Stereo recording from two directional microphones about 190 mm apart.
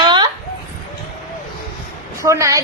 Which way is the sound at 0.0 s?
25° right (ahead or behind).